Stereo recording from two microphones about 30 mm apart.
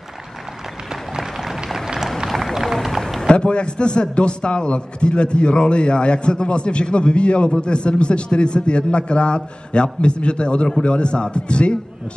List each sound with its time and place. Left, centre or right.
1.4 s a sound: centre
2.5 s run: centre
3.3 s a man's voice: left